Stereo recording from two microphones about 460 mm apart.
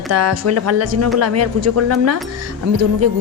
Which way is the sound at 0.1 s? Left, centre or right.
Right.